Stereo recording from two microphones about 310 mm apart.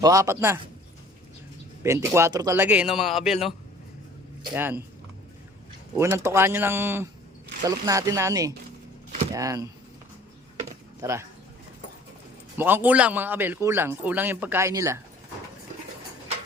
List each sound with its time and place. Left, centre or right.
0.0 s a man's voice: centre
1.8 s a man's voice: centre
4.5 s a man's voice: centre
6.0 s a man's voice: centre
10.7 s a sound: centre
12.5 s a man's voice: centre